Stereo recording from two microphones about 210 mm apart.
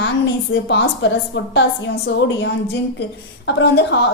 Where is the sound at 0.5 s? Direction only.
55° left (ahead or behind).